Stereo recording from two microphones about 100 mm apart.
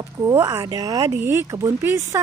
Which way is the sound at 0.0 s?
35° right (ahead or behind).